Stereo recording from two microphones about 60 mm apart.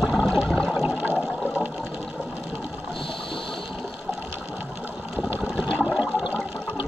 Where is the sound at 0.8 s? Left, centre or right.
Right.